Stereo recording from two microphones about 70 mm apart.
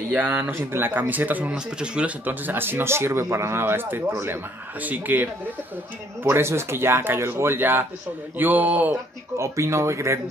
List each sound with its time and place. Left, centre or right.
0.1 s speech: right
1.5 s speech: centre
6.2 s speech: right
9.4 s speech: right